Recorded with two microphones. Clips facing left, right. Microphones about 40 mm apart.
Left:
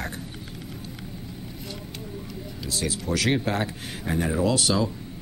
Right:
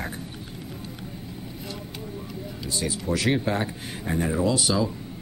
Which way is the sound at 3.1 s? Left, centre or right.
Left.